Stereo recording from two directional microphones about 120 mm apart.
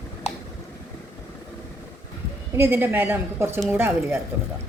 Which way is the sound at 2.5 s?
15° right (ahead or behind).